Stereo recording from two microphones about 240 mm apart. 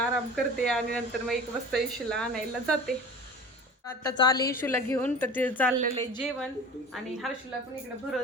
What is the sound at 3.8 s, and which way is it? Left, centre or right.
Speech, centre.